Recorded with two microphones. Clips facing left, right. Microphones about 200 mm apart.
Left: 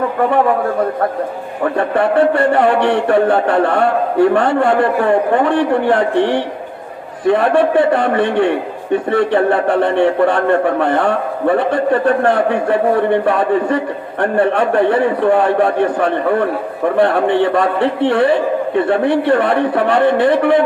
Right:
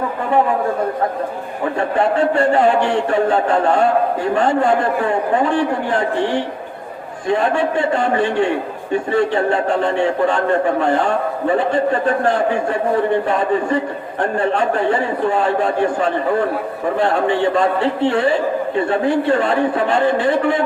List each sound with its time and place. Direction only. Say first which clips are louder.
2.0 s a man's voice: left 3 dB; 60° left (ahead or behind)